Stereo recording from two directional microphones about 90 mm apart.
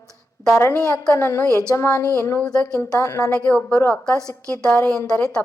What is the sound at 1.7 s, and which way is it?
Speech, 30° left (ahead or behind).